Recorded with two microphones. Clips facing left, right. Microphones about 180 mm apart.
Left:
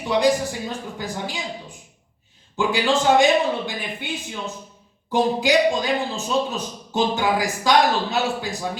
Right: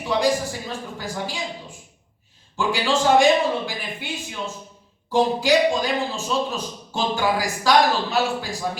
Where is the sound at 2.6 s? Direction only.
20° left (ahead or behind).